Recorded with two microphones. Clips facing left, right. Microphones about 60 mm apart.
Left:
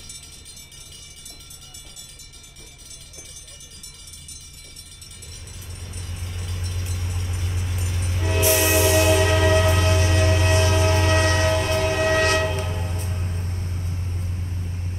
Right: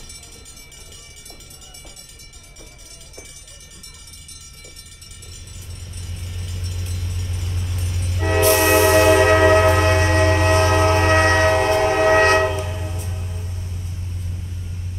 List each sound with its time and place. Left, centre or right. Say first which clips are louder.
6.2 s vehicle: even; centre
8.2 s train: right 5 dB; right
12.5 s train: right 1 dB; centre
13.0 s vehicle: left 1 dB; left